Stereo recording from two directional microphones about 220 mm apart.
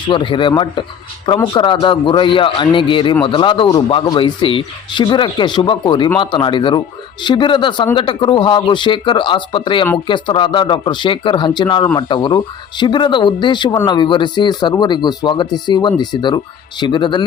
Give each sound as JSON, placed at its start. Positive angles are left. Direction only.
{"t": 0.1, "sound": "a man's voice", "side_deg": 20}